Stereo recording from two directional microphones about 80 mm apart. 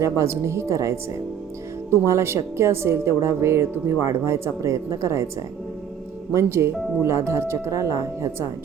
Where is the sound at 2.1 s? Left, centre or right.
Right.